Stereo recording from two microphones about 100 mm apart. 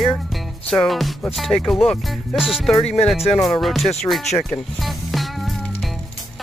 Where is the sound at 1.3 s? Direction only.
Centre (ahead or behind).